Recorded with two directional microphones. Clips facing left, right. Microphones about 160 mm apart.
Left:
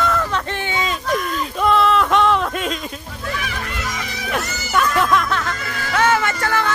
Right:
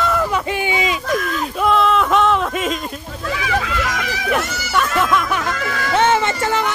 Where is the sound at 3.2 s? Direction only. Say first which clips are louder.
Right 6 dB; 90° right.